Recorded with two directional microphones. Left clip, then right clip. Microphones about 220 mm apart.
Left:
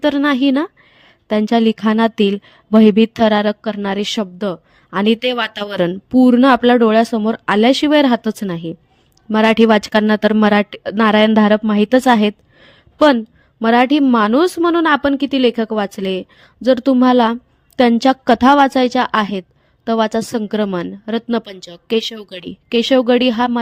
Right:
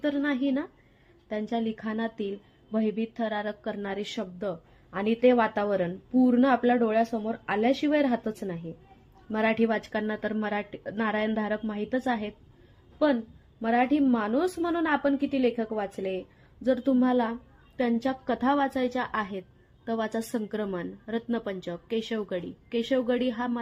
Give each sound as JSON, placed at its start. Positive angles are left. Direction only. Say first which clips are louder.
{"t": 0.0, "sound": "speech", "louder": "left 13 dB", "side_deg": 45}
{"t": 13.6, "sound": "speech", "louder": "left 12 dB", "side_deg": 45}